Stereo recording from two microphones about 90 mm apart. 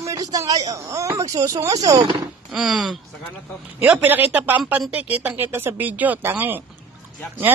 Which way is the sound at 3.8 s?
20° right (ahead or behind).